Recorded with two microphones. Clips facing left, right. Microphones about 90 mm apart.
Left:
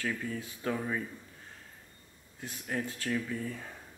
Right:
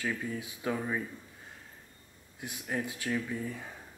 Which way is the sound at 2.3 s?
15° right (ahead or behind).